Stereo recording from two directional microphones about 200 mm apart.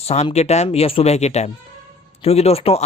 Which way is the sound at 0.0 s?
30° left (ahead or behind).